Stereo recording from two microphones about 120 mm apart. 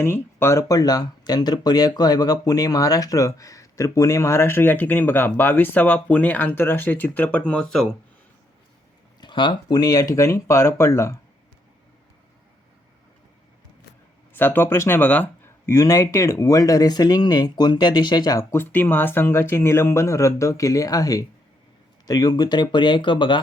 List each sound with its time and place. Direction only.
0.0 s speech: 20° left (ahead or behind); by 7.9 s 5° left (ahead or behind)
9.2 s speech: 40° left (ahead or behind); by 11.2 s 25° left (ahead or behind)
14.3 s speech: 15° left (ahead or behind)
15.7 s speech: 25° left (ahead or behind)
18.5 s speech: 20° left (ahead or behind); by 23.4 s 40° left (ahead or behind)